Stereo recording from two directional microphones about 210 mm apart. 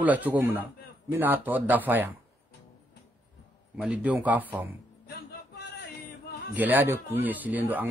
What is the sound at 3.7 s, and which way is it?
Speech, 5° right (ahead or behind).